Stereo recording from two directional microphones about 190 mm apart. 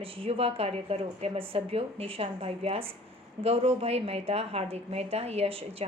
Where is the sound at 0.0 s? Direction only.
30° right (ahead or behind).